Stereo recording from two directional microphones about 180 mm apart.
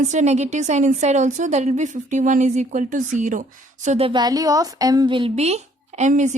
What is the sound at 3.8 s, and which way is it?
A woman's voice, 35° right (ahead or behind).